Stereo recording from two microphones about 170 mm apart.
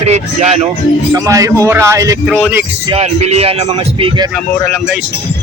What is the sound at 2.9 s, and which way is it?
Speech, 40° right (ahead or behind).